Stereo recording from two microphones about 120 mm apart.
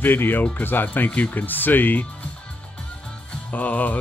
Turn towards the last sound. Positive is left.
turn(degrees=15)  # may be behind; listen again after turning